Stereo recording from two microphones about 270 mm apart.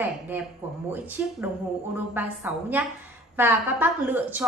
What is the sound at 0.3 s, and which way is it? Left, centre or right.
Speech, centre.